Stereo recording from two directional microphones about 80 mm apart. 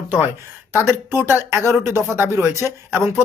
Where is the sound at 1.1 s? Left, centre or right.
Right.